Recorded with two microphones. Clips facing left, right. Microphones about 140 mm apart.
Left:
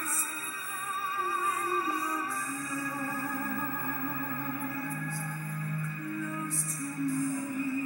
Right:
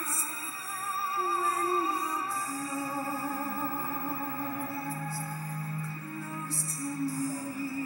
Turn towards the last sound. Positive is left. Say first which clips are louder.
# left 2 dB
turn(degrees=-35)  # may be behind; listen again after turning